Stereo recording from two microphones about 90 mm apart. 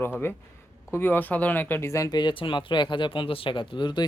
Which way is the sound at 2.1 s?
60° left (ahead or behind).